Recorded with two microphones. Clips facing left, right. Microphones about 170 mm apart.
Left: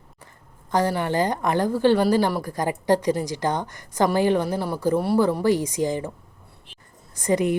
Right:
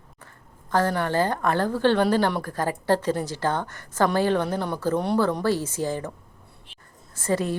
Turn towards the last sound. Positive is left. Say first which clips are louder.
# left 4 dB
turn(degrees=15)  # may be behind; listen again after turning